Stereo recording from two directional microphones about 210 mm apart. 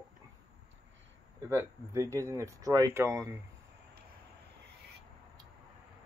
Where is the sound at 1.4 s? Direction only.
15° right (ahead or behind).